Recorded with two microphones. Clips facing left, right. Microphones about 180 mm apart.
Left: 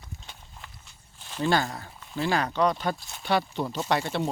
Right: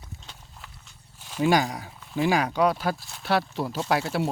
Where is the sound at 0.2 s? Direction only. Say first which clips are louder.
Even; centre (ahead or behind).